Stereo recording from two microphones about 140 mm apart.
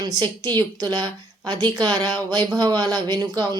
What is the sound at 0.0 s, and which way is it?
Speech, 30° right (ahead or behind).